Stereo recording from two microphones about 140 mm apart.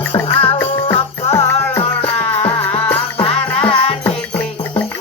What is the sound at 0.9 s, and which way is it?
Music, 45° left (ahead or behind).